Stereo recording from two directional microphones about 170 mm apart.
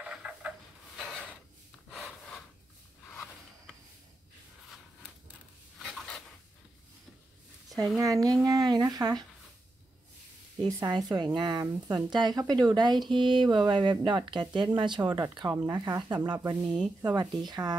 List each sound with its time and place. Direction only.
0.0 s a sound: 5° right (ahead or behind)
1.9 s gasp: centre (ahead or behind)
5.8 s stir: centre (ahead or behind)
8.0 s speech: 20° right (ahead or behind)
10.8 s speech: 25° right (ahead or behind)
16.6 s speech: 5° right (ahead or behind)
17.5 s speech: 25° right (ahead or behind)